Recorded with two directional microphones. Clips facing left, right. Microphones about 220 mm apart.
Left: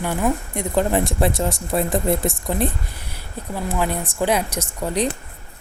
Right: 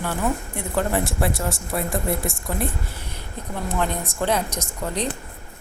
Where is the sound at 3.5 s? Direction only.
5° left (ahead or behind).